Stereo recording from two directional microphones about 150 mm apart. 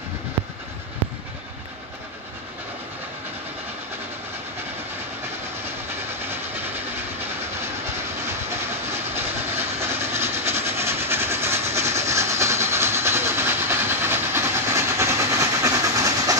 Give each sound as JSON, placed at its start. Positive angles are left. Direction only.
{"t": 9.8, "sound": "train", "side_deg": -15}